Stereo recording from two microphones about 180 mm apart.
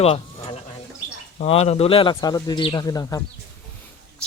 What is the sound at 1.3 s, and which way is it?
Speech, 35° left (ahead or behind).